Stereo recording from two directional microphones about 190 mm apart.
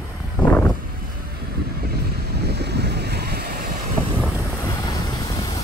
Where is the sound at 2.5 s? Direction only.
60° right (ahead or behind).